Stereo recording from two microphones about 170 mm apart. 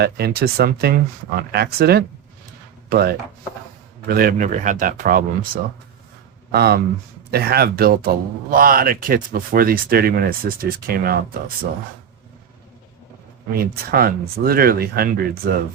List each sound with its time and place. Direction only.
0.0 s speech: 70° right (ahead or behind)
6.5 s speech: 70° right (ahead or behind)
13.5 s speech: 60° right (ahead or behind)